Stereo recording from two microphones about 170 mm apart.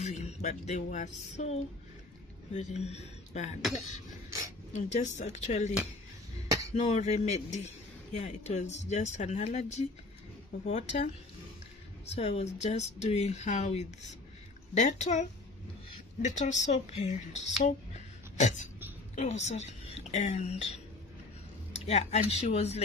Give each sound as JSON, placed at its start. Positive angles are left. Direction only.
{"t": 0.0, "sound": "a man's voice", "side_deg": 40}
{"t": 4.7, "sound": "a man's voice", "side_deg": 45}
{"t": 12.1, "sound": "a man's voice", "side_deg": 40}
{"t": 16.2, "sound": "a woman's voice", "side_deg": 45}
{"t": 21.8, "sound": "a man's voice", "side_deg": 40}